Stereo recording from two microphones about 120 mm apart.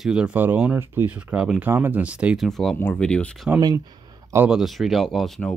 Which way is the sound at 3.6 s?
35° right (ahead or behind).